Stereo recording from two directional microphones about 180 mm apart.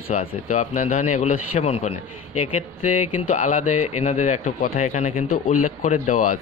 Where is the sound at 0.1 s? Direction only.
40° left (ahead or behind).